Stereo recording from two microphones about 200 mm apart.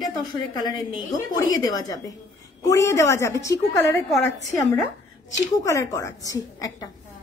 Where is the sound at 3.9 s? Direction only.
Centre (ahead or behind).